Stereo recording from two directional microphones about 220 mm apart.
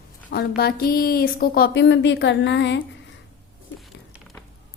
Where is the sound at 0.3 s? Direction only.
45° left (ahead or behind).